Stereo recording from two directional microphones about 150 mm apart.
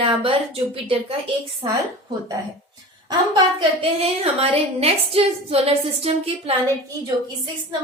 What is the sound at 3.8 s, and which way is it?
A woman's voice, 40° right (ahead or behind).